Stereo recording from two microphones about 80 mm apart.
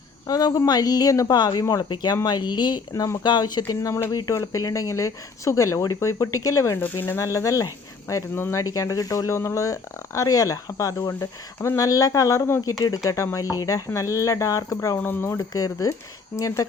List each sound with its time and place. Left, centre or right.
0.3 s speech: left
1.8 s speech: left
2.9 s speech: left
3.2 s speech: left
6.7 s speech: left
14.9 s speech: left
15.4 s speech: left